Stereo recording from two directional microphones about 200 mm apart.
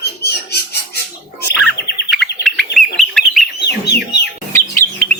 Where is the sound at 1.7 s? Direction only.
55° left (ahead or behind).